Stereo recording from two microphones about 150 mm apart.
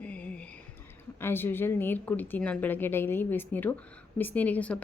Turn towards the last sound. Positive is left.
turn(degrees=10)  # may be behind; listen again after turning